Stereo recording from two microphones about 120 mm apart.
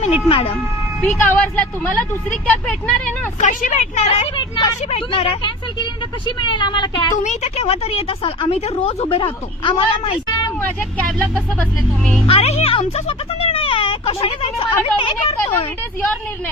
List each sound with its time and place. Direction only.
0.3 s speech: 55° left (ahead or behind)
1.0 s speech: 15° left (ahead or behind)
3.4 s speech: 70° left (ahead or behind)
4.4 s speech: 40° left (ahead or behind)
4.9 s speech: 55° left (ahead or behind); by 7.1 s 40° left (ahead or behind)
7.2 s speech: 75° left (ahead or behind); by 10.5 s 40° left (ahead or behind)
10.9 s speech: 15° left (ahead or behind)
12.2 s speech: 55° left (ahead or behind)